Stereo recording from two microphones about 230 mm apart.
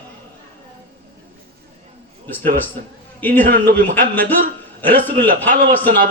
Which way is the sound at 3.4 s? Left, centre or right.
Right.